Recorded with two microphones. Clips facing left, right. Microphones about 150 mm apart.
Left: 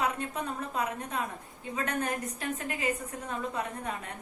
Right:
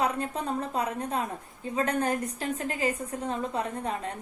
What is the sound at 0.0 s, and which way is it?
A woman's voice, 35° right (ahead or behind).